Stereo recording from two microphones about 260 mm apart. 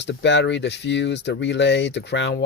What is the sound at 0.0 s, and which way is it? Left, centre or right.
Speech, left.